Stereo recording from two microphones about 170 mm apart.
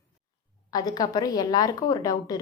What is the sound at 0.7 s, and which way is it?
A woman's voice, 25° left (ahead or behind).